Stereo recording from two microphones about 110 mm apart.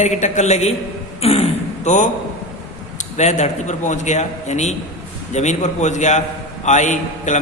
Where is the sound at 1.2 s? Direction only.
70° left (ahead or behind); by 2.1 s 90° left.